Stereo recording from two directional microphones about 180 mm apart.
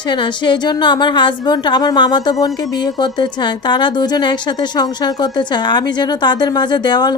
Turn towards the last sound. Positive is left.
turn(degrees=25)  # may be behind; listen again after turning